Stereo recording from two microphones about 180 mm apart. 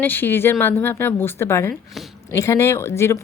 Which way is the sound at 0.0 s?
10° left (ahead or behind).